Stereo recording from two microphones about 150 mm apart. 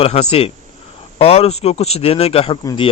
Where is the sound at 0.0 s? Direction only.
45° left (ahead or behind).